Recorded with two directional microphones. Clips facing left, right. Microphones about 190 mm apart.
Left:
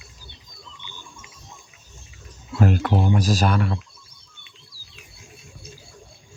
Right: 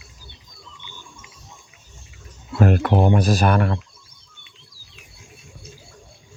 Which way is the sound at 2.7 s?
70° right (ahead or behind).